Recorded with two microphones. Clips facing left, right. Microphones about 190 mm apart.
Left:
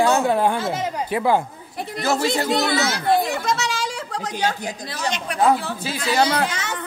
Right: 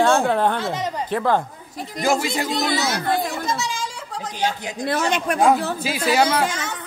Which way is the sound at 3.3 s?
75° left (ahead or behind).